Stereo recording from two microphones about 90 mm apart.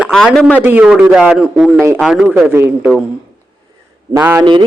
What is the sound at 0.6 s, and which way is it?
Speech, 20° right (ahead or behind).